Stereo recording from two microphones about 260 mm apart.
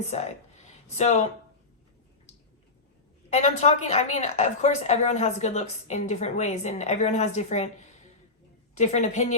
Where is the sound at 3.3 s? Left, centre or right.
Left.